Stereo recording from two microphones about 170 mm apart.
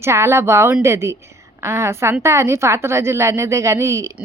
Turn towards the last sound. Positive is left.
turn(degrees=-15)  # may be behind; listen again after turning